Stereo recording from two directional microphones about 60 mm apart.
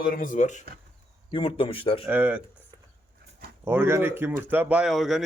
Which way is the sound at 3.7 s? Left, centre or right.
Right.